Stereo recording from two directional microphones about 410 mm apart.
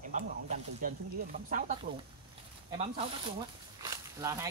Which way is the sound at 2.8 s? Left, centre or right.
Centre.